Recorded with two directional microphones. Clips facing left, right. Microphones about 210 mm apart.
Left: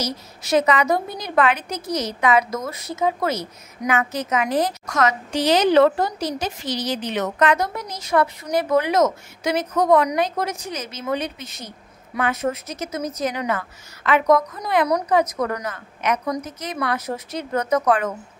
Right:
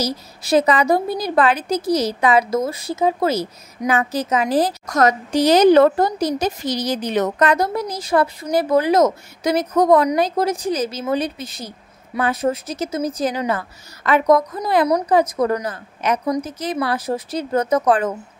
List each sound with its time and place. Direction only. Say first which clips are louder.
0.0 s a woman's voice: right 4 dB; 35° right (ahead or behind)